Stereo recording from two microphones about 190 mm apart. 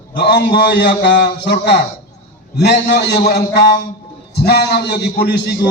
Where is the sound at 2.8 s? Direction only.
65° left (ahead or behind).